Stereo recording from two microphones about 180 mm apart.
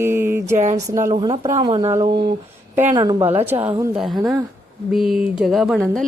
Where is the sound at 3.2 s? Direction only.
10° right (ahead or behind).